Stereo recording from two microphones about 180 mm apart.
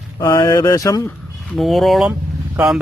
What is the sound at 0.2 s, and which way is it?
Speech, 20° left (ahead or behind).